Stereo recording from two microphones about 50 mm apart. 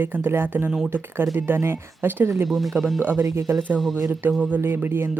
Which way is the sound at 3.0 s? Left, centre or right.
Right.